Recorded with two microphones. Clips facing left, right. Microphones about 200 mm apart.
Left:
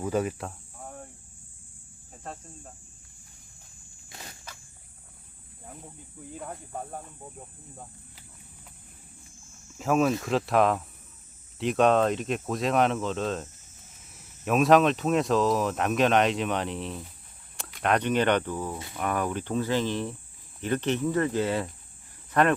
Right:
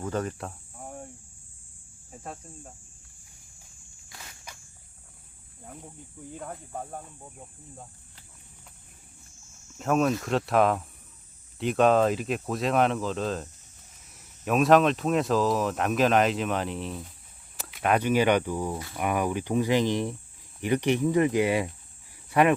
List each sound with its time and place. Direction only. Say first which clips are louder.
0.0 s speech: left 3 dB; 10° left (ahead or behind)
2.1 s cricket: right 2 dB; 5° right (ahead or behind)
4.1 s a sound: left 3 dB; 35° left (ahead or behind)
6.3 s speech: even; centre (ahead or behind)
9.7 s speech: even; centre (ahead or behind)